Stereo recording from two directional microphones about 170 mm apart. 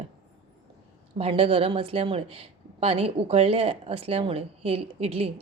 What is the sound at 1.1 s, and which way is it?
A woman's voice, 35° right (ahead or behind).